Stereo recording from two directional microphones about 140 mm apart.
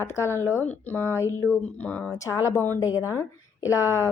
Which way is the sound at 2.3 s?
25° left (ahead or behind).